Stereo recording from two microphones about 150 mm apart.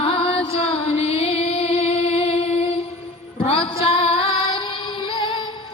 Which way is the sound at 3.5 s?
40° left (ahead or behind).